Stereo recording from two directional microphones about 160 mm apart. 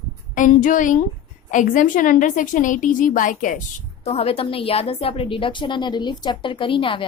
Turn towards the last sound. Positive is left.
turn(degrees=30)  # may be behind; listen again after turning